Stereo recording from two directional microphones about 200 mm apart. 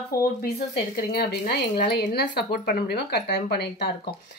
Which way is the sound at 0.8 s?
50° left (ahead or behind).